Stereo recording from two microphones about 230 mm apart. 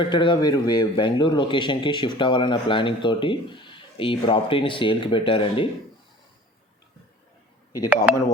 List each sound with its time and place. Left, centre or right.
0.0 s a man's voice: left